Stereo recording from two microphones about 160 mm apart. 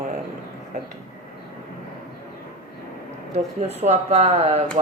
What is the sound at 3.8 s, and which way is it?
Speech, 40° right (ahead or behind).